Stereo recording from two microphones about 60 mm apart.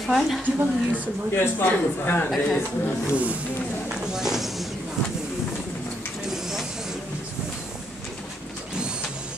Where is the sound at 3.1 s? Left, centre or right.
Right.